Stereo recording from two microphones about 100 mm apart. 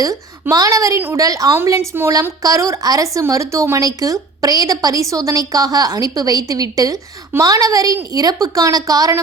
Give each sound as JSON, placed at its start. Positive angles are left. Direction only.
{"t": 0.5, "sound": "a woman's voice", "side_deg": -35}